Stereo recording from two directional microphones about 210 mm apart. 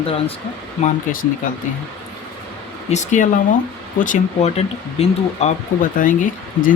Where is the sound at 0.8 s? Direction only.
40° left (ahead or behind).